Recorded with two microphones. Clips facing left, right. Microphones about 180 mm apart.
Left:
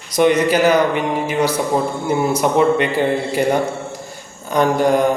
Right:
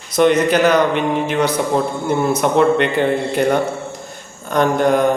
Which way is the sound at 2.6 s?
60° right (ahead or behind).